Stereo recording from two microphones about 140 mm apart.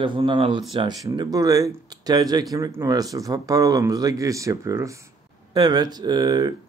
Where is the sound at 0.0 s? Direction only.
35° right (ahead or behind).